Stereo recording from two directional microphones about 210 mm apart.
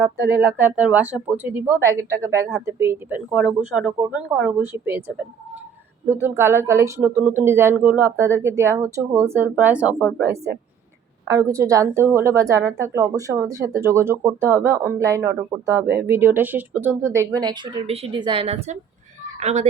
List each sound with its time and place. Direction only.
0.0 s a woman's voice: 10° right (ahead or behind); by 19.6 s 30° right (ahead or behind)